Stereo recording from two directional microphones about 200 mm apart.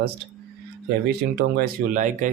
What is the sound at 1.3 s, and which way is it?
Speech, 45° right (ahead or behind).